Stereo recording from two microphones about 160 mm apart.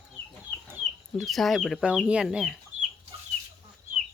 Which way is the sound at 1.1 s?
Centre (ahead or behind).